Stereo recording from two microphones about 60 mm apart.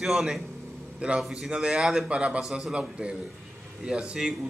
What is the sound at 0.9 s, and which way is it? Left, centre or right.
A man's voice, centre.